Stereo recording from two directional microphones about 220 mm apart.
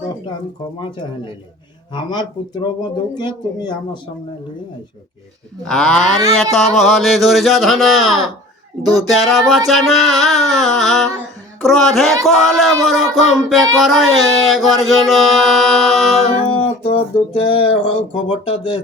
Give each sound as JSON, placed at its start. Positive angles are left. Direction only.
{"t": 1.9, "sound": "music", "side_deg": 20}
{"t": 5.6, "sound": "a sound", "side_deg": 5}
{"t": 16.5, "sound": "music", "side_deg": 25}